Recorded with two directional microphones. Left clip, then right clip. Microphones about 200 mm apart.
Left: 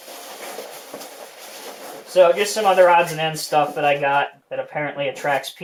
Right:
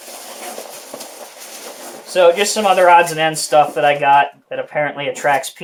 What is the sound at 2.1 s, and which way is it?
Speech, 60° right (ahead or behind).